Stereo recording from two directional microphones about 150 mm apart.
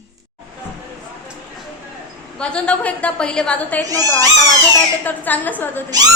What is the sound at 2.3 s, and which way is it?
A woman's voice, 5° left (ahead or behind).